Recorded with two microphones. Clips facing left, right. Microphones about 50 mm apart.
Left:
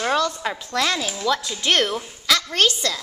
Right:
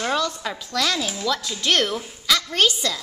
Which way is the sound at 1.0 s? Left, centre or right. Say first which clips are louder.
Left 2 dB; centre.